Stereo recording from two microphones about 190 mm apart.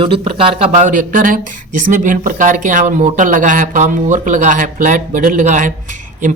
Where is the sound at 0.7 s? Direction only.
45° right (ahead or behind).